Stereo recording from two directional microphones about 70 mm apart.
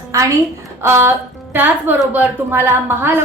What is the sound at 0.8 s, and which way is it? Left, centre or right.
A woman's voice, right.